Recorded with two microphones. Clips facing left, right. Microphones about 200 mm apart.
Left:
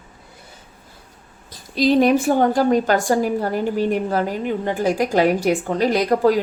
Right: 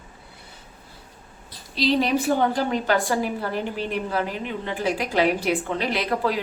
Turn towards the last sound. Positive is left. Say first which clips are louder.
# left 8 dB
turn(degrees=45)  # may be behind; listen again after turning